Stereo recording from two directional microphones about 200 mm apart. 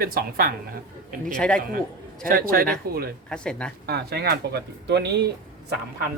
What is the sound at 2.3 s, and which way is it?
Speech, 45° right (ahead or behind).